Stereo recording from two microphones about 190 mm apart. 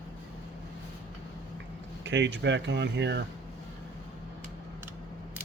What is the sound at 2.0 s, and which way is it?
Speech, 70° right (ahead or behind).